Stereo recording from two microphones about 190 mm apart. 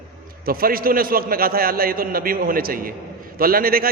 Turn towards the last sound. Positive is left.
turn(degrees=-50)  # may be behind; listen again after turning